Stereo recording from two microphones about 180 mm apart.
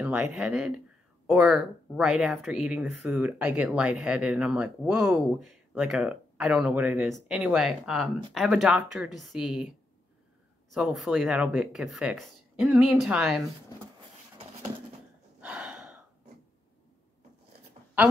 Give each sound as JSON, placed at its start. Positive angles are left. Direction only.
{"t": 0.0, "sound": "speech", "side_deg": -5}
{"t": 10.7, "sound": "speech", "side_deg": 0}
{"t": 15.4, "sound": "gasp", "side_deg": -5}